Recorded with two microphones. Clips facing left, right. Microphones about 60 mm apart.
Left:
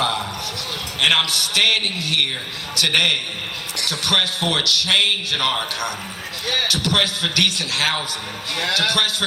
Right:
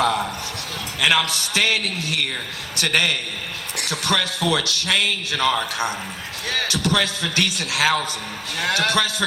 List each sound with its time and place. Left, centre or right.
0.9 s a man's voice: right